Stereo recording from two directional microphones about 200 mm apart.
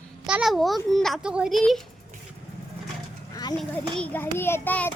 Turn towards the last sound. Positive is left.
turn(degrees=10)  # may be behind; listen again after turning